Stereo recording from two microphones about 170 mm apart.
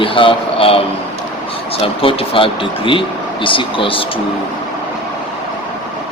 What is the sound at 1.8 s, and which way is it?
Speech, 30° left (ahead or behind).